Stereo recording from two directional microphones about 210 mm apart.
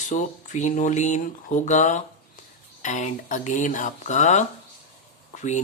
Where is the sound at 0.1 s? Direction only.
35° left (ahead or behind).